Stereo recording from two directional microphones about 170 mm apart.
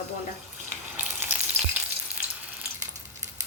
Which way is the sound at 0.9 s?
10° right (ahead or behind).